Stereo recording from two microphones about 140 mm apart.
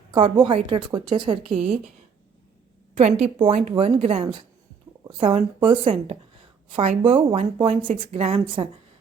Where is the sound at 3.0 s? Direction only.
50° right (ahead or behind).